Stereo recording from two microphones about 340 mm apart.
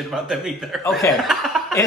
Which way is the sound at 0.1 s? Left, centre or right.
Centre.